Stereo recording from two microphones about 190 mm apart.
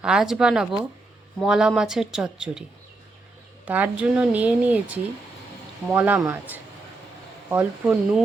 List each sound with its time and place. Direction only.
0.0 s speech: 5° right (ahead or behind)
3.7 s a woman's voice: 5° right (ahead or behind)
5.9 s a woman's voice: 10° right (ahead or behind)